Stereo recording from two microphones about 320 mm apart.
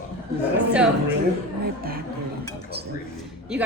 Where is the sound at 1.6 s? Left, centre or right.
Right.